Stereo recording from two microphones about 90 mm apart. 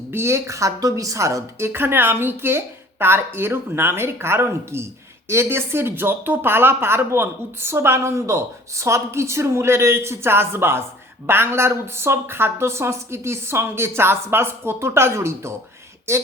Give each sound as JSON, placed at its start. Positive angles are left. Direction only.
{"t": 0.1, "sound": "speech", "side_deg": -30}